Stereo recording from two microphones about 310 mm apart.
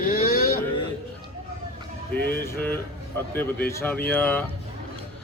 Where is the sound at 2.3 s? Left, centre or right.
Centre.